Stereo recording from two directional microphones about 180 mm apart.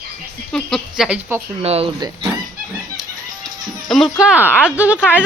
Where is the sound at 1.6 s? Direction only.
35° right (ahead or behind).